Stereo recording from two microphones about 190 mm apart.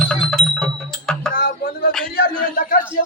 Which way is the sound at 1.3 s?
50° left (ahead or behind).